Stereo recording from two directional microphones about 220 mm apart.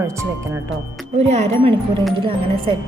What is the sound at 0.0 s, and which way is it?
Speech, 10° right (ahead or behind).